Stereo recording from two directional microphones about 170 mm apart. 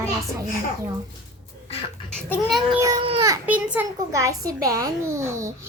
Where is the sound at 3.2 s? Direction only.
15° right (ahead or behind).